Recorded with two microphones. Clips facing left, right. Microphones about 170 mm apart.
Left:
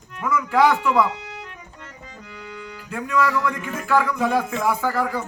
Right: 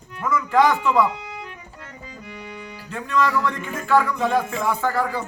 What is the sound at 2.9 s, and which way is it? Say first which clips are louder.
Speech: even; 5° left (ahead or behind).